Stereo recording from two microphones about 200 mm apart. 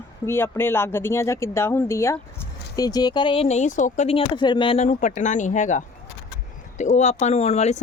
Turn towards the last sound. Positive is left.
turn(degrees=35)  # may be behind; listen again after turning